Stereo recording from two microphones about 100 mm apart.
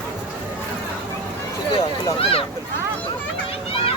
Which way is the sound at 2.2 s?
70° left (ahead or behind).